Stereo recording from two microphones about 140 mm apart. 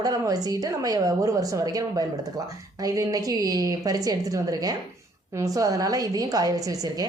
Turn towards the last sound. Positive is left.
turn(degrees=-25)  # may be behind; listen again after turning